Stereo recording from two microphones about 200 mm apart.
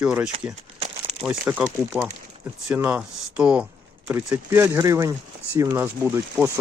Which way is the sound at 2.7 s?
10° right (ahead or behind).